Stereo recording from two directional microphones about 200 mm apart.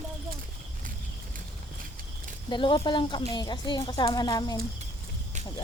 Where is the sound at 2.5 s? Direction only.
25° left (ahead or behind).